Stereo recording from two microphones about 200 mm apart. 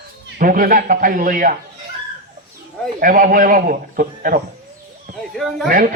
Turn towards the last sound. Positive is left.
turn(degrees=-45)  # may be behind; listen again after turning